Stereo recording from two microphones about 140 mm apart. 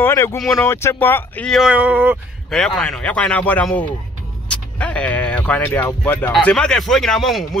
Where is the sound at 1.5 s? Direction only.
5° right (ahead or behind).